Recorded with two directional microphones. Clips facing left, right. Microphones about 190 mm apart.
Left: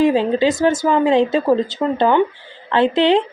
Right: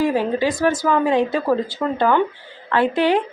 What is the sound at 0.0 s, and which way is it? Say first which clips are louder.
A woman's voice: left 4 dB; 25° left (ahead or behind).